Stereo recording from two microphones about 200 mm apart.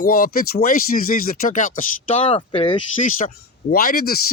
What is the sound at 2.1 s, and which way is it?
Speech, 30° left (ahead or behind).